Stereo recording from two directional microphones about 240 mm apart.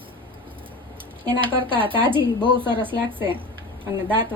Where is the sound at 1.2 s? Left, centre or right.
Right.